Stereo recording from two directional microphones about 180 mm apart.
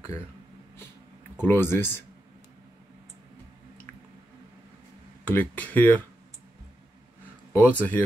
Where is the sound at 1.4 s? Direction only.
10° left (ahead or behind).